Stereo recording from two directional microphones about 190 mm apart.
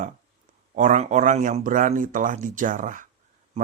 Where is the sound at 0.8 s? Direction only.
40° right (ahead or behind).